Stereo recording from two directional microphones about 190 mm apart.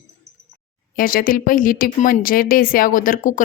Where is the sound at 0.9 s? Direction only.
50° left (ahead or behind).